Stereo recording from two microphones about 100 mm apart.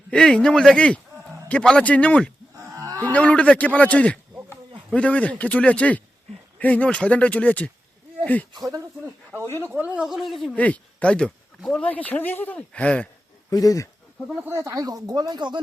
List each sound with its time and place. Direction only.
0.1 s speech: 10° left (ahead or behind)
2.7 s cattle: 35° right (ahead or behind)
3.0 s speech: 15° left (ahead or behind)
8.5 s speech: 35° right (ahead or behind)
9.0 s a sound: 25° right (ahead or behind)
9.6 s speech: 15° right (ahead or behind)
10.1 s speech: centre (ahead or behind)
10.5 s speech: 15° left (ahead or behind)
13.5 s speech: 35° left (ahead or behind)
14.4 s speech: 30° right (ahead or behind); by 15.6 s 50° right (ahead or behind)